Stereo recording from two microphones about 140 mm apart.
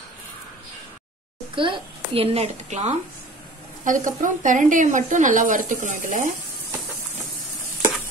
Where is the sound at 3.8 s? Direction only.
70° right (ahead or behind).